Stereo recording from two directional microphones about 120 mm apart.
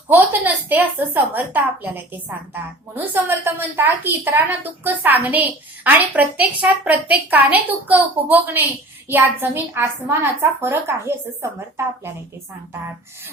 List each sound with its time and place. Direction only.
0.1 s a woman's voice: 15° right (ahead or behind)